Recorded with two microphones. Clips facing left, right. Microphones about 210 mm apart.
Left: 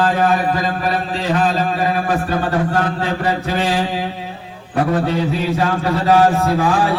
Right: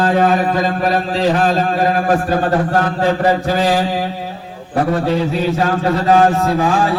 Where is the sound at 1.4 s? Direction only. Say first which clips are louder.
Right 3 dB; 45° right (ahead or behind).